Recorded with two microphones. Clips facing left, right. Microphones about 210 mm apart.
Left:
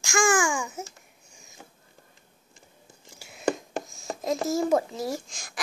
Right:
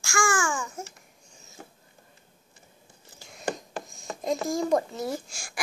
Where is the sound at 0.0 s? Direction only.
20° left (ahead or behind).